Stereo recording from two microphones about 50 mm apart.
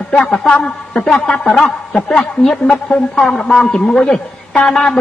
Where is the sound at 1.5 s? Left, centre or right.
Centre.